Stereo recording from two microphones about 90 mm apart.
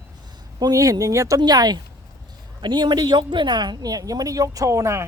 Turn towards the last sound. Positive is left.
turn(degrees=-30)  # may be behind; listen again after turning